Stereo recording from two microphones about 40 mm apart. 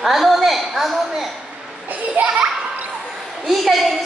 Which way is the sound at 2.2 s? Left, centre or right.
Right.